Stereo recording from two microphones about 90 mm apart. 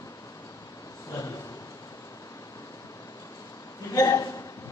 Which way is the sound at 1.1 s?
40° left (ahead or behind).